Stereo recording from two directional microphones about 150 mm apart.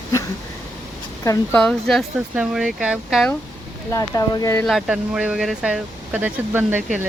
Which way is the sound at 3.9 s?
20° left (ahead or behind).